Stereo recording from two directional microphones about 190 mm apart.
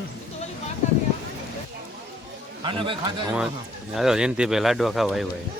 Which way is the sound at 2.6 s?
25° right (ahead or behind).